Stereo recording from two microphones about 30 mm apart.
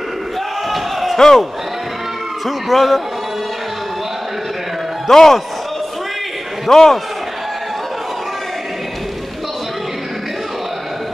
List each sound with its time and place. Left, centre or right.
0.7 s slam: centre
1.1 s speech: centre
2.4 s speech: centre
5.1 s speech: centre
6.7 s a man's voice: centre